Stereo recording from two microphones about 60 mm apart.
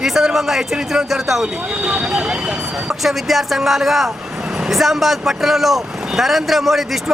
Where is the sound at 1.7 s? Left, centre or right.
Centre.